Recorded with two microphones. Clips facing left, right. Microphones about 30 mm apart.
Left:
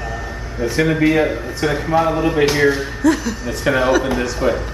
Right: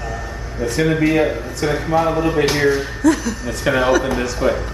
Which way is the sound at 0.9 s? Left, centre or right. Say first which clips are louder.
Even; centre.